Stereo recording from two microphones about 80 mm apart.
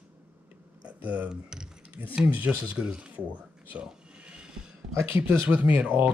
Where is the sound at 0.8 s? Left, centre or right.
Centre.